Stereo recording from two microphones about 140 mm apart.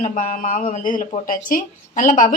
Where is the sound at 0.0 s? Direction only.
60° left (ahead or behind).